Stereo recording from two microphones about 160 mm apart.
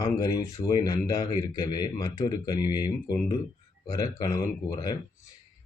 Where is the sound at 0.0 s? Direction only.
25° left (ahead or behind).